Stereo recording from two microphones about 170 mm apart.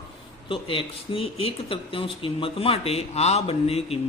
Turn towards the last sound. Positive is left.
turn(degrees=35)  # may be behind; listen again after turning